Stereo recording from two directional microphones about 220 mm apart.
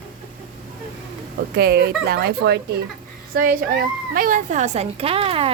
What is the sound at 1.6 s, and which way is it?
A woman's voice, 45° right (ahead or behind).